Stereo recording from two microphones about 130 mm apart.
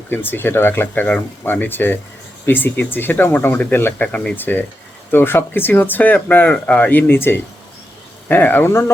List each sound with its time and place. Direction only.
0.1 s speech: 15° left (ahead or behind)